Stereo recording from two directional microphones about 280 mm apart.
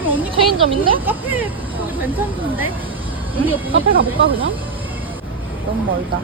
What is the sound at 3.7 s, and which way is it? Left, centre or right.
Speech, right.